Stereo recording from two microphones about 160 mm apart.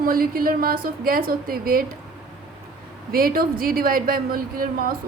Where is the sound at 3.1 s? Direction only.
65° right (ahead or behind).